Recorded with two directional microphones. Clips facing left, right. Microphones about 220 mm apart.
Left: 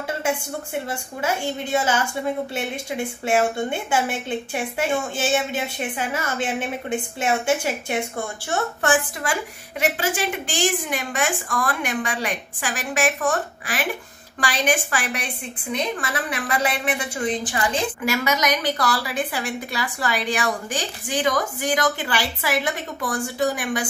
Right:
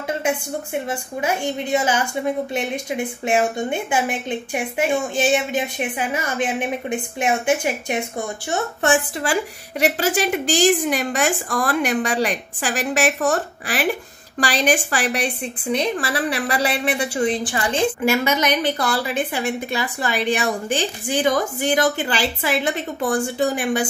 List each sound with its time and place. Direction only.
0.8 s a woman's voice: 15° right (ahead or behind)